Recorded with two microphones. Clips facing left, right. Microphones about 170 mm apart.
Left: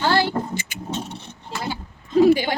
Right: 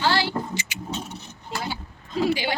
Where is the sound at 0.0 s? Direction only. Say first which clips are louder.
Left 3 dB; 50° left (ahead or behind).